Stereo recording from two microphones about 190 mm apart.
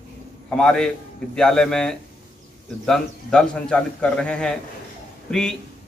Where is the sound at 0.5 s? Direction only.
5° left (ahead or behind).